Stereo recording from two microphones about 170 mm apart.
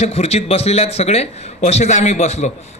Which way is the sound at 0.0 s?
40° left (ahead or behind).